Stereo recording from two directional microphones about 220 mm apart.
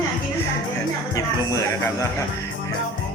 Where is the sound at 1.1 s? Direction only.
15° left (ahead or behind).